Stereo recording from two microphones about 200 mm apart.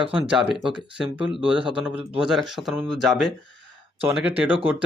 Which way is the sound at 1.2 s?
25° right (ahead or behind).